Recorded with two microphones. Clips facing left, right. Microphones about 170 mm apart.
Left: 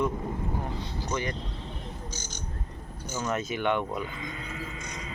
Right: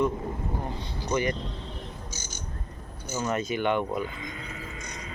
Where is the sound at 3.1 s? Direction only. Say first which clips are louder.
Right 2 dB; 5° right (ahead or behind).